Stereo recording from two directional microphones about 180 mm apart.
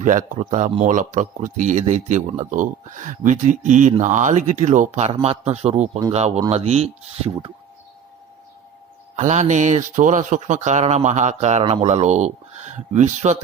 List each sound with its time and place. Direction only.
0.0 s speech: 45° right (ahead or behind)
9.1 s speech: 40° right (ahead or behind)